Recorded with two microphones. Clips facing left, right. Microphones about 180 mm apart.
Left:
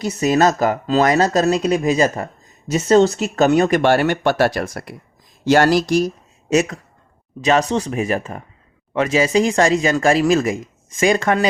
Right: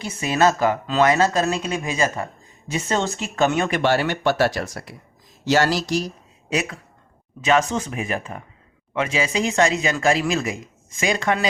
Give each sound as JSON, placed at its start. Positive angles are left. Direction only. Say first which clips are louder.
{"t": 0.0, "sound": "speech", "louder": "left 4 dB", "side_deg": 40}